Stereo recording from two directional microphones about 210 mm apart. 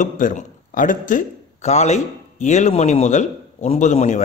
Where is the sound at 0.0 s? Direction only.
35° left (ahead or behind).